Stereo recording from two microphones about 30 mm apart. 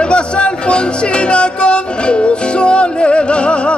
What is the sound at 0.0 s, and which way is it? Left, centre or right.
Music, left.